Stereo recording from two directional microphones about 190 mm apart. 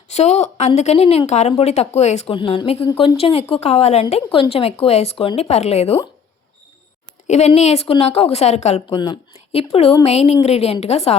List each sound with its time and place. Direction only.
0.1 s a woman's voice: 35° left (ahead or behind)
7.3 s speech: 35° left (ahead or behind)